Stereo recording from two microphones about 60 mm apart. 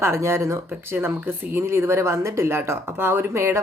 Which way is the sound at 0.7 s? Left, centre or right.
Right.